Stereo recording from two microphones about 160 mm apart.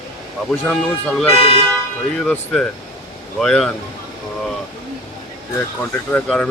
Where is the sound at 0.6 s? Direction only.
5° left (ahead or behind).